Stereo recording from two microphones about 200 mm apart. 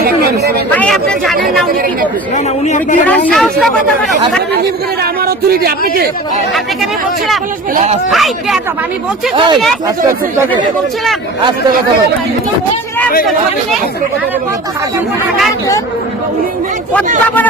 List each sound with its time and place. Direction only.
0.7 s speech: 5° left (ahead or behind)
2.3 s speech: 35° left (ahead or behind)
3.1 s speech: 5° left (ahead or behind)
5.2 s speech: 50° right (ahead or behind)
8.1 s speech: centre (ahead or behind)
9.3 s speech: 25° right (ahead or behind)